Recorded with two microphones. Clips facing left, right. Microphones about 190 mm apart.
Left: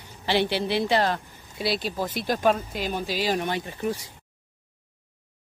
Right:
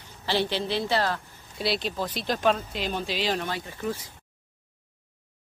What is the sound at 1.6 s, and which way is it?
Speech, centre (ahead or behind).